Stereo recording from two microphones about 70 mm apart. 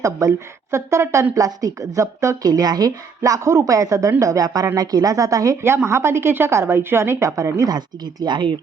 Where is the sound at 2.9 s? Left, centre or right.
Right.